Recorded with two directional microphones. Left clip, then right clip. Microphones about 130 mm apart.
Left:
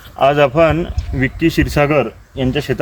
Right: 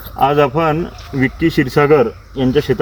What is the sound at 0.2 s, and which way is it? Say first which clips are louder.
Speech: left 2 dB; 25° left (ahead or behind).